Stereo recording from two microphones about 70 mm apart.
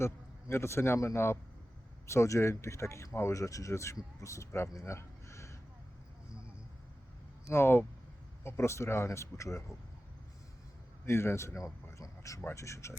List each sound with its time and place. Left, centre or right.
0.0 s a man's voice: left
4.9 s a sound: left
7.4 s a man's voice: left
11.0 s speech: left